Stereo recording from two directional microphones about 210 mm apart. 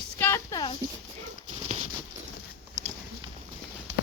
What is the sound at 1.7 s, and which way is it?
Patter, 35° right (ahead or behind).